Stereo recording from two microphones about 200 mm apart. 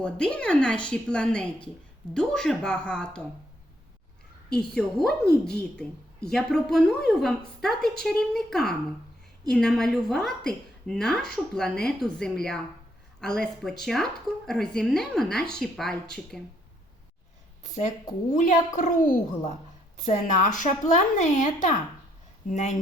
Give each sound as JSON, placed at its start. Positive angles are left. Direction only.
{"t": 0.0, "sound": "a woman's voice", "side_deg": 5}
{"t": 4.5, "sound": "a woman's voice", "side_deg": 0}
{"t": 18.3, "sound": "a woman's voice", "side_deg": 40}